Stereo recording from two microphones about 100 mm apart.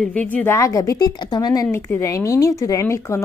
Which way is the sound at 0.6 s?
30° left (ahead or behind).